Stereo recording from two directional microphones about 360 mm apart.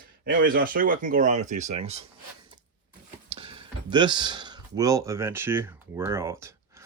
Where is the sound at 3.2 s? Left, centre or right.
Centre.